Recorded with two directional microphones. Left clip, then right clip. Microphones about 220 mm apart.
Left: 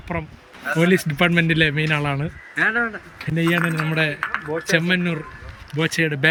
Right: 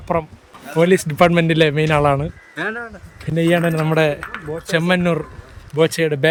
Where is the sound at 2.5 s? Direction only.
35° right (ahead or behind).